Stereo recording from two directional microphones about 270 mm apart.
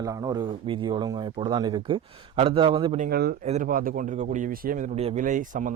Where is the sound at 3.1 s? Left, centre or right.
Right.